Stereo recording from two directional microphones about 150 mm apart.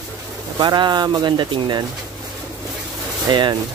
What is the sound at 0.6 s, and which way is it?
Speech, 30° right (ahead or behind).